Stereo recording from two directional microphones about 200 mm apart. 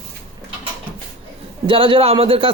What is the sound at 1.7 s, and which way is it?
Speech, 25° right (ahead or behind).